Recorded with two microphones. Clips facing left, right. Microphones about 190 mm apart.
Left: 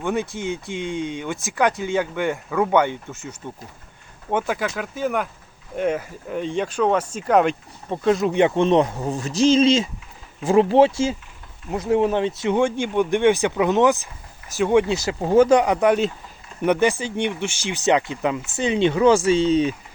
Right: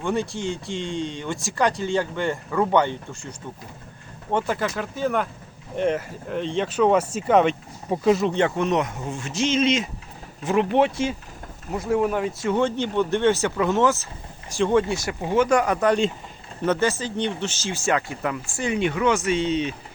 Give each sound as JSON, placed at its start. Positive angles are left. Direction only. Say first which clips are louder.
{"t": 0.2, "sound": "speech", "louder": "left 1 dB", "side_deg": 20}
{"t": 1.4, "sound": "speech", "louder": "left 2 dB", "side_deg": 0}
{"t": 2.0, "sound": "speech", "louder": "left 2 dB", "side_deg": 15}
{"t": 2.3, "sound": "speech", "louder": "left 1 dB", "side_deg": 0}
{"t": 3.4, "sound": "speech", "louder": "left 2 dB", "side_deg": 15}
{"t": 4.3, "sound": "speech", "louder": "left 1 dB", "side_deg": 5}
{"t": 8.3, "sound": "speech", "louder": "left 4 dB", "side_deg": 15}
{"t": 8.5, "sound": "speech", "louder": "left 5 dB", "side_deg": 30}